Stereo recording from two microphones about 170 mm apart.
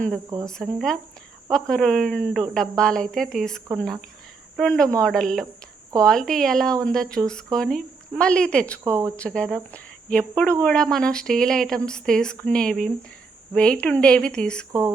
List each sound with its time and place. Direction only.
0.4 s speech: centre (ahead or behind)
8.8 s speech: 15° right (ahead or behind)
9.1 s speech: 5° left (ahead or behind)
14.7 s speech: 20° right (ahead or behind)